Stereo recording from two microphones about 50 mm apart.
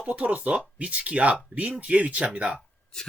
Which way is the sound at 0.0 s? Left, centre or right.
Right.